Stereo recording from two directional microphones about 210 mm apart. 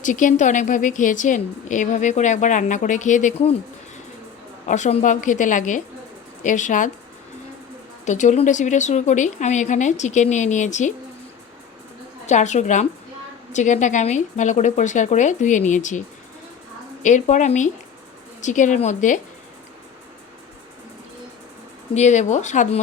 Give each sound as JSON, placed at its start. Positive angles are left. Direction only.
{"t": 0.0, "sound": "a woman's voice", "side_deg": 40}
{"t": 4.6, "sound": "a woman's voice", "side_deg": 35}
{"t": 8.0, "sound": "a woman's voice", "side_deg": 35}
{"t": 12.2, "sound": "a woman's voice", "side_deg": 35}
{"t": 21.9, "sound": "a woman's voice", "side_deg": 35}